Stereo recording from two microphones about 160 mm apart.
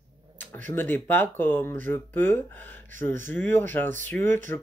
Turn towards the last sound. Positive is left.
turn(degrees=15)  # may be behind; listen again after turning